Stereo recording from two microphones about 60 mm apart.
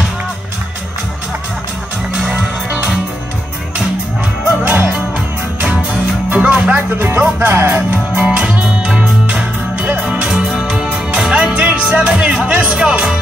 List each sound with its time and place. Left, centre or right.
2.2 s music: right
4.6 s music: right
5.9 s music: centre
7.0 s music: right
10.2 s music: centre
12.4 s speech: right